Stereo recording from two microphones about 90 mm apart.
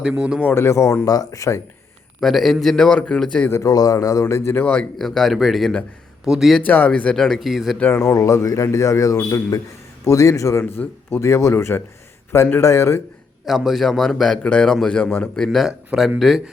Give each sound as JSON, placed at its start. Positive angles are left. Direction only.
{"t": 0.2, "sound": "speech", "side_deg": -10}
{"t": 0.4, "sound": "a man's voice", "side_deg": 25}
{"t": 2.2, "sound": "a man's voice", "side_deg": 0}
{"t": 3.5, "sound": "a man's voice", "side_deg": 40}
{"t": 4.6, "sound": "speech", "side_deg": 15}
{"t": 4.9, "sound": "a man's voice", "side_deg": 5}
{"t": 6.7, "sound": "a man's voice", "side_deg": 15}
{"t": 7.8, "sound": "speech", "side_deg": 20}
{"t": 8.1, "sound": "a man's voice", "side_deg": 35}
{"t": 13.4, "sound": "a man's voice", "side_deg": 0}
{"t": 15.4, "sound": "a man's voice", "side_deg": -5}